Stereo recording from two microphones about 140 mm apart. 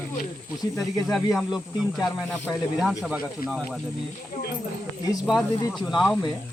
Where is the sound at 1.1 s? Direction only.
Centre (ahead or behind).